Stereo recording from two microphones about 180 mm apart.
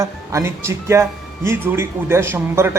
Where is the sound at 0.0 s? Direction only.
15° right (ahead or behind).